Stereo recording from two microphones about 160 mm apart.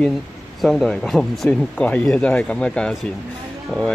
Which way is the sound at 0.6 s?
Centre (ahead or behind).